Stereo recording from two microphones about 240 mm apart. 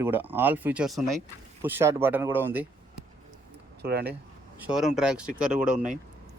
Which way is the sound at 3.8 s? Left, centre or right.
Right.